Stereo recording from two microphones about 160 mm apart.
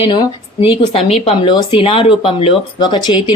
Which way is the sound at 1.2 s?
30° left (ahead or behind).